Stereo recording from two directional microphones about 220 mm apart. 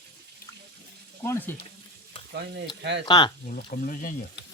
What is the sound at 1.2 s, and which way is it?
Speech, 10° left (ahead or behind).